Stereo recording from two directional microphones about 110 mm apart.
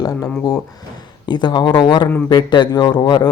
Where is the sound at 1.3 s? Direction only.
45° left (ahead or behind).